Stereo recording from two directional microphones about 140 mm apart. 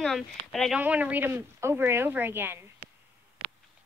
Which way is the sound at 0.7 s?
10° right (ahead or behind).